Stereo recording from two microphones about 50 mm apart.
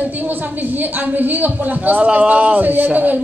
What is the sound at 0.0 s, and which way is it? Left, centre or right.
A woman's voice, right.